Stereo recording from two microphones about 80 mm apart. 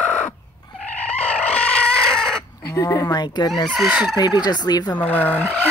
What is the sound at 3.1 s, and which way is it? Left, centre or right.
Speech, left.